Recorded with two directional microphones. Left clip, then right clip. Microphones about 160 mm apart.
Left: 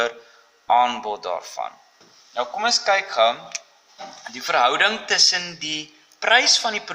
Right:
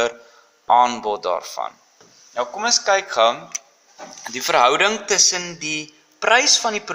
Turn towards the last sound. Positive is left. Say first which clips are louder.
# right 1 dB
turn(degrees=-20)  # may be behind; listen again after turning